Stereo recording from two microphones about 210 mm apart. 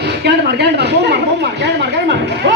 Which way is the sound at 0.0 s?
50° right (ahead or behind).